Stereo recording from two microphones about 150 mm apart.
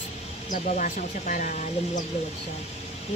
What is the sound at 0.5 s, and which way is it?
Speech, 60° left (ahead or behind).